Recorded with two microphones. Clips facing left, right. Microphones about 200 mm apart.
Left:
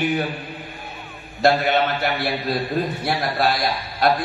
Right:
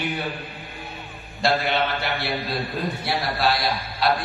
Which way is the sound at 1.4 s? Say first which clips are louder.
Left 5 dB; 50° left (ahead or behind).